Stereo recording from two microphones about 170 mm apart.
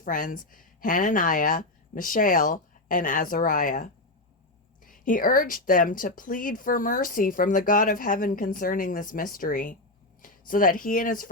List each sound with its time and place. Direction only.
0.0 s speech: 50° left (ahead or behind)